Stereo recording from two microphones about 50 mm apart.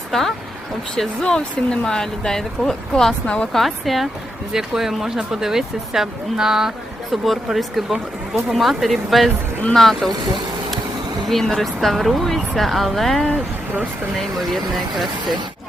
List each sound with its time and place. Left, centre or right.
0.1 s speech: centre
0.9 s speech: centre
3.2 s speech: left
3.5 s speech: centre
11.3 s speech: centre